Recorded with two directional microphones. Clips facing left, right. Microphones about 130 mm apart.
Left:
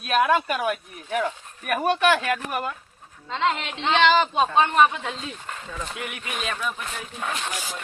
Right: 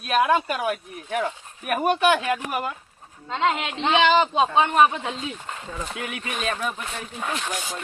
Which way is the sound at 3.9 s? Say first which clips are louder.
Even; 10° right (ahead or behind).